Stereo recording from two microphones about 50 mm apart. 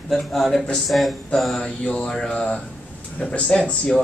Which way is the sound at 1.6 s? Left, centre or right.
Centre.